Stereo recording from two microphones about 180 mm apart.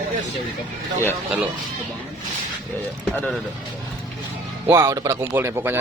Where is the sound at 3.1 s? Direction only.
10° left (ahead or behind).